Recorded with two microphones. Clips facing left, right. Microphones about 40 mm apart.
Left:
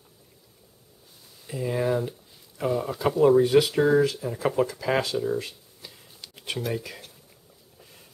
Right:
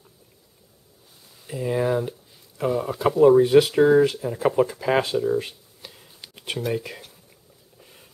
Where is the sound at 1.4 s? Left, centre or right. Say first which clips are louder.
Right 3 dB; centre.